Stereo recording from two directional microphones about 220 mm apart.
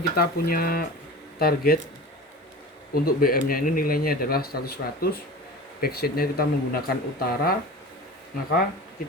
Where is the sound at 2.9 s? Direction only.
40° left (ahead or behind).